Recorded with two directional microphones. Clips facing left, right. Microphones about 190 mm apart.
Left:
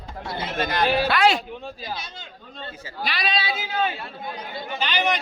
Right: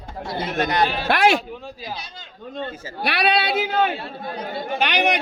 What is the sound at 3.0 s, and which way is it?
A man's voice, 65° right (ahead or behind).